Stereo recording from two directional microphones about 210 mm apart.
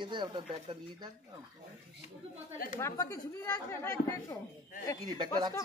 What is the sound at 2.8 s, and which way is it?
Speech, 15° left (ahead or behind).